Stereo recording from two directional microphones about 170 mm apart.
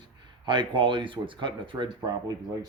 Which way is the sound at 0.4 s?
25° right (ahead or behind).